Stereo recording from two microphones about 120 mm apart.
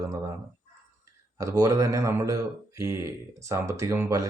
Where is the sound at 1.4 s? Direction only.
30° right (ahead or behind).